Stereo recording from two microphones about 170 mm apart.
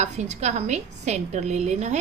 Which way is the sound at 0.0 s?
40° right (ahead or behind).